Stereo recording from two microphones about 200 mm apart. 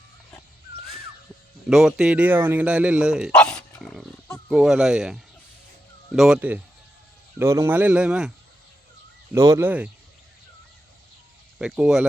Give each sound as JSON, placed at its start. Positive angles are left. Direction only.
{"t": 1.7, "sound": "speech", "side_deg": -5}
{"t": 9.3, "sound": "speech", "side_deg": -15}
{"t": 11.6, "sound": "speech", "side_deg": -5}